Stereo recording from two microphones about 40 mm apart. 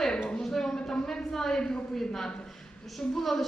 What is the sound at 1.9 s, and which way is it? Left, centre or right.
A woman's voice, centre.